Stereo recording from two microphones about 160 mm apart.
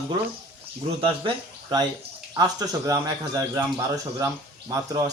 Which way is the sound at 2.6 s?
20° right (ahead or behind).